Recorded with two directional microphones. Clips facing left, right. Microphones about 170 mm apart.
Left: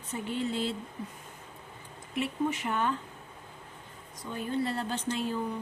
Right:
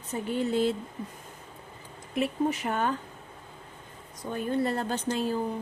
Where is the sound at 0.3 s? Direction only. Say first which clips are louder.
Right 6 dB; 45° right (ahead or behind).